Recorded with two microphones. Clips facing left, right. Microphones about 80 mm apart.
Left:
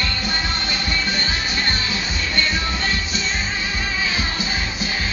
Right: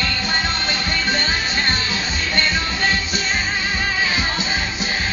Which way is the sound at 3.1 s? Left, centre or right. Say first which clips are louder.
Right 2 dB; centre.